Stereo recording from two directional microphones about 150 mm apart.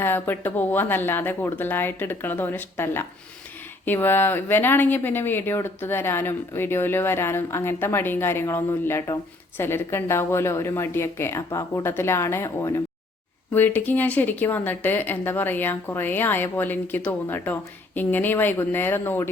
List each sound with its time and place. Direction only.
0.0 s speech: 15° left (ahead or behind)